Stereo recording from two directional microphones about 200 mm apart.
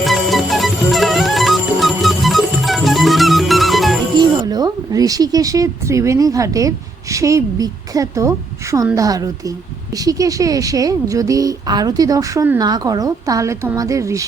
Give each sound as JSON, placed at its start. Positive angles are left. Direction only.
{"t": 0.0, "sound": "music", "side_deg": 0}
{"t": 4.2, "sound": "speech", "side_deg": -20}